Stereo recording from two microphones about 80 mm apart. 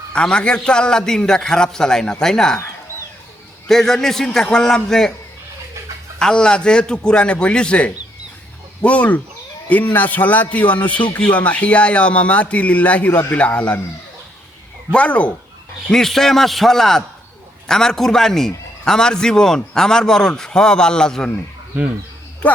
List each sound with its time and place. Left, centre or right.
0.1 s a man's voice: centre
3.7 s a man's voice: centre
6.1 s a man's voice: centre
13.1 s a man's voice: left
13.3 s a man's voice: centre
14.9 s a man's voice: centre
15.9 s a man's voice: centre
22.4 s speech: centre